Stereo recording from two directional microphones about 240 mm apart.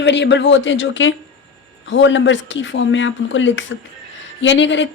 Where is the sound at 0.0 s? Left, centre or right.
Left.